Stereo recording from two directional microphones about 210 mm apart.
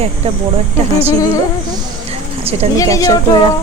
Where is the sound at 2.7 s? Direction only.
15° left (ahead or behind).